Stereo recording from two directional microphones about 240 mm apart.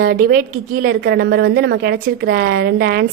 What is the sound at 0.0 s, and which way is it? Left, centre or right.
A woman's voice, right.